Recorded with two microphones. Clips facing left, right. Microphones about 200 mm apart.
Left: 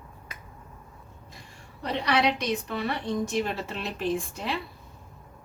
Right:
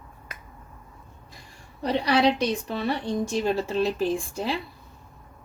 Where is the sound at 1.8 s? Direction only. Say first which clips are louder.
Right 4 dB; 35° right (ahead or behind).